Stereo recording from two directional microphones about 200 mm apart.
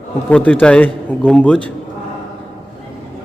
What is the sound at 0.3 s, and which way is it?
A man's voice, 5° left (ahead or behind).